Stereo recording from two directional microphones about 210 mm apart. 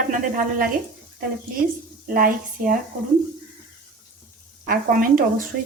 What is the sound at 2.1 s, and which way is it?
Speech, 40° right (ahead or behind).